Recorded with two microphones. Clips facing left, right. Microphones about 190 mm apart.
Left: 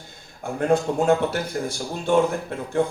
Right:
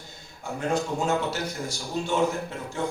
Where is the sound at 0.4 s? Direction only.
55° left (ahead or behind).